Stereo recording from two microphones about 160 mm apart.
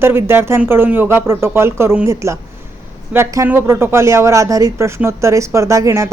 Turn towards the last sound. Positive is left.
turn(degrees=-20)  # may be behind; listen again after turning